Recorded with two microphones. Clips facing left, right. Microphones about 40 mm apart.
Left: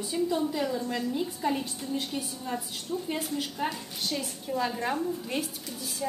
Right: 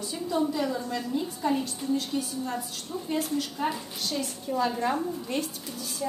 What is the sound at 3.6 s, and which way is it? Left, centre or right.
A woman's voice, centre.